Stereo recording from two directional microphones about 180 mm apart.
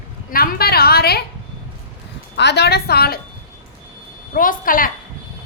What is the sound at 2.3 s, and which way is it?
Speech, 70° left (ahead or behind).